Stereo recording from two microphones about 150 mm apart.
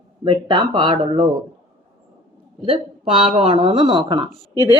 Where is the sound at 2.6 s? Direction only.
35° right (ahead or behind).